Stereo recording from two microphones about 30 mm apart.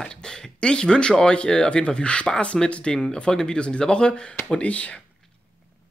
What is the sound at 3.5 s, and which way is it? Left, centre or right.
Speech, left.